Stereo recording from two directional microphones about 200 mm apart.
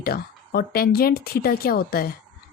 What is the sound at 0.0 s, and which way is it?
A woman's voice, 50° left (ahead or behind).